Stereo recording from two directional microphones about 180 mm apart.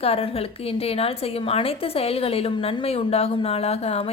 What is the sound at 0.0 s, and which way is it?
A woman's voice, 35° left (ahead or behind).